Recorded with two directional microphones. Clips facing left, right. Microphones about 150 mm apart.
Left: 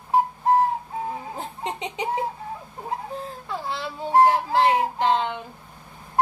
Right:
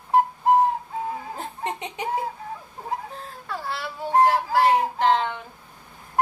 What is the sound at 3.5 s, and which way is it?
Child singing, 20° left (ahead or behind).